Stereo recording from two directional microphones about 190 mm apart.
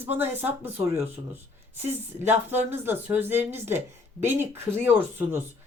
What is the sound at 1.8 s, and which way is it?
Speech, 35° right (ahead or behind).